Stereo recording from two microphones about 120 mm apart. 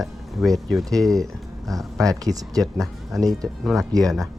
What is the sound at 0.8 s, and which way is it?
Speech, 30° right (ahead or behind).